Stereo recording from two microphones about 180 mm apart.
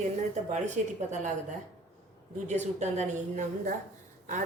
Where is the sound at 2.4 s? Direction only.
40° right (ahead or behind).